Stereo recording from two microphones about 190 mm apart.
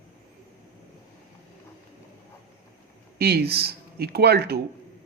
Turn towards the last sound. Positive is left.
turn(degrees=-60)  # may be behind; listen again after turning